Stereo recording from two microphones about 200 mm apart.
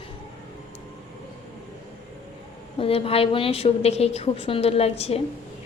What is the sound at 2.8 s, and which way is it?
A woman's voice, 30° left (ahead or behind).